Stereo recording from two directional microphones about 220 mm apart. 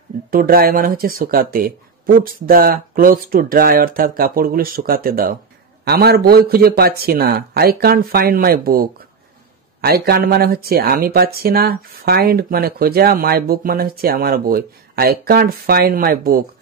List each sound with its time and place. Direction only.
0.3 s speech: 40° right (ahead or behind)